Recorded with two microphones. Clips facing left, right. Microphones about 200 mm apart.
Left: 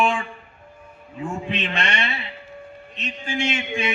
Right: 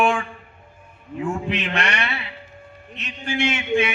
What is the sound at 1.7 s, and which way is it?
Mantra, 70° right (ahead or behind).